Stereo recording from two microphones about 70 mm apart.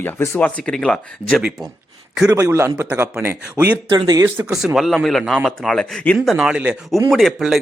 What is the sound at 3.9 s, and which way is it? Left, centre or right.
Speech, right.